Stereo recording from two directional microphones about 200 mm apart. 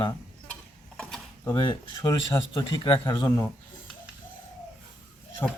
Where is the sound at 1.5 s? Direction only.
20° left (ahead or behind).